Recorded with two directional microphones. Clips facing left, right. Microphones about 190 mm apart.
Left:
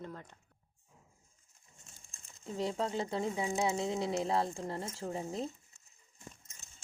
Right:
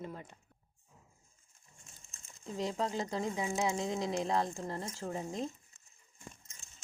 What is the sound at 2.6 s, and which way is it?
Speech, 30° left (ahead or behind).